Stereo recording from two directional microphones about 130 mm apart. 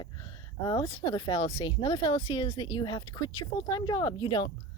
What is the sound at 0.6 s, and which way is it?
Speech, 35° left (ahead or behind).